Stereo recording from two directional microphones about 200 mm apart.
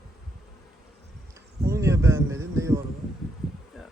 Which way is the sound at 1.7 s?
15° right (ahead or behind).